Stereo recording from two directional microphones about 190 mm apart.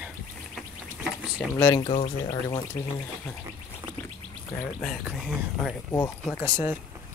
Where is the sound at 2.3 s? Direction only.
20° left (ahead or behind).